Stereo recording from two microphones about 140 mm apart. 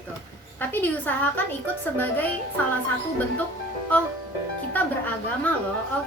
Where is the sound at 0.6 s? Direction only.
15° left (ahead or behind).